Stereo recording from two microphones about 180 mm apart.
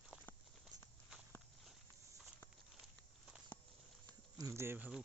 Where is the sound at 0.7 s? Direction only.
20° right (ahead or behind).